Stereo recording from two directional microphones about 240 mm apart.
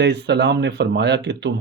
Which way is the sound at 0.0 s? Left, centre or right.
Right.